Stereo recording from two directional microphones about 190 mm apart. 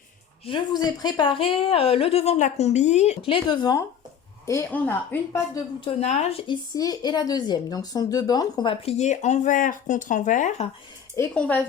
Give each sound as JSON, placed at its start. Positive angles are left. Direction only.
{"t": 0.4, "sound": "speech", "side_deg": 25}
{"t": 5.8, "sound": "a woman's voice", "side_deg": 35}
{"t": 6.7, "sound": "a woman's voice", "side_deg": 20}
{"t": 11.1, "sound": "speech", "side_deg": 10}